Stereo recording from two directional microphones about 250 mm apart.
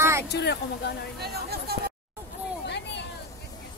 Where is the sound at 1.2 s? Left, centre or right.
Right.